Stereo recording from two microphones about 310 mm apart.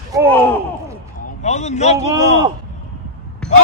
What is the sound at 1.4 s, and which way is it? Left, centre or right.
Speech, left.